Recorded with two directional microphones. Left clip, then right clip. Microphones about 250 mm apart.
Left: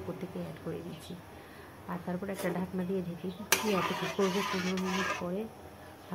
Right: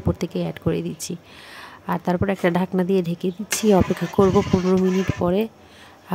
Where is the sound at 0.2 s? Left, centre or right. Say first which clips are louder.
Right 15 dB; right.